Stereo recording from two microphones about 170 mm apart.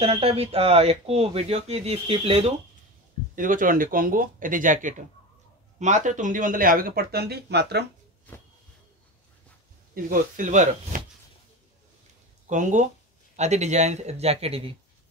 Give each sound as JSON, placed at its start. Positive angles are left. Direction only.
{"t": 0.0, "sound": "speech", "side_deg": -35}
{"t": 3.3, "sound": "speech", "side_deg": -50}
{"t": 10.0, "sound": "speech", "side_deg": -50}
{"t": 12.4, "sound": "speech", "side_deg": -45}